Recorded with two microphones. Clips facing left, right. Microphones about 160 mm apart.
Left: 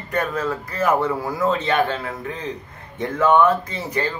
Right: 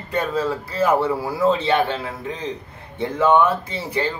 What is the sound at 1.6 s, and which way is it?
Speech, 30° right (ahead or behind).